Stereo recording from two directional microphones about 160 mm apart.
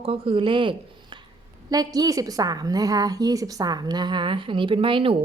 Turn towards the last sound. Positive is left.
turn(degrees=-35)  # may be behind; listen again after turning